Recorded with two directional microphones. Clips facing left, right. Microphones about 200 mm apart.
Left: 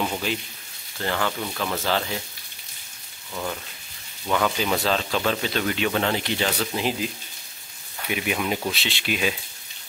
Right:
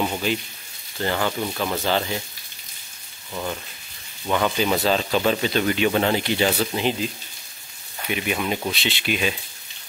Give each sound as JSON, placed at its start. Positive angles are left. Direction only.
{"t": 0.0, "sound": "speech", "side_deg": -5}
{"t": 4.3, "sound": "speech", "side_deg": -5}
{"t": 6.7, "sound": "speech", "side_deg": 5}
{"t": 8.1, "sound": "speech", "side_deg": 5}